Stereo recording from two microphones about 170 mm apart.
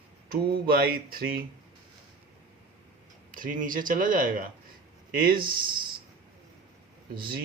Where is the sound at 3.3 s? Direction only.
55° right (ahead or behind).